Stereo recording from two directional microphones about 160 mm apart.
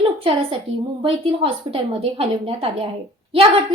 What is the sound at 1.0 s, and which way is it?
A woman's voice, 35° right (ahead or behind).